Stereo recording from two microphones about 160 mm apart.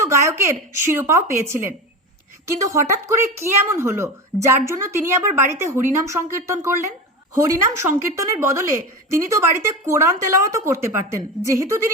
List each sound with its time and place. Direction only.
0.0 s a woman's voice: 20° right (ahead or behind)